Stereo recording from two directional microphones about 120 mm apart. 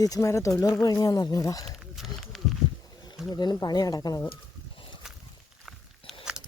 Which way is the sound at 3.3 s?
35° left (ahead or behind).